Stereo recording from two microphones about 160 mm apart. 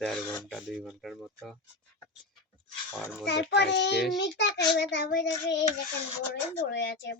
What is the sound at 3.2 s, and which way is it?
A child's voice, 90° left.